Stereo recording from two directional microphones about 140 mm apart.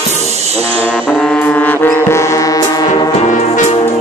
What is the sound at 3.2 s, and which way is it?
Music, 60° left (ahead or behind).